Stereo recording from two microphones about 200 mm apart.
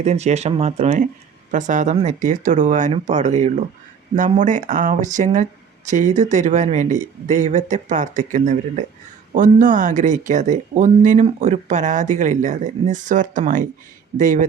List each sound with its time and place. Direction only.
0.0 s speech: 35° right (ahead or behind)